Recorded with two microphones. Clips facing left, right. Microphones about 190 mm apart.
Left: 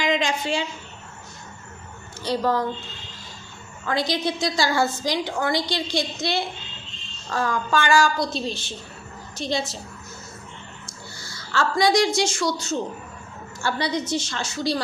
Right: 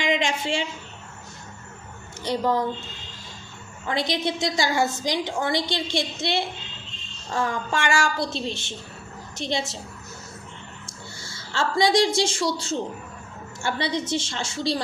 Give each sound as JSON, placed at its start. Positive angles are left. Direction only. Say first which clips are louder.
{"t": 0.0, "sound": "a sound", "louder": "left 1 dB", "side_deg": -25}
{"t": 2.2, "sound": "a woman's voice", "louder": "left 1 dB", "side_deg": -20}
{"t": 3.8, "sound": "a woman's voice", "louder": "left 1 dB", "side_deg": -20}
{"t": 10.8, "sound": "a woman's voice", "louder": "even", "side_deg": -25}